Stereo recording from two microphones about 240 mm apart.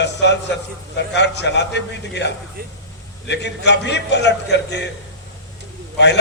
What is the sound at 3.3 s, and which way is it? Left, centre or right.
A man's voice, left.